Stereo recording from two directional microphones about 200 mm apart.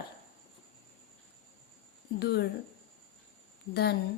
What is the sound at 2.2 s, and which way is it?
Speech, 55° left (ahead or behind).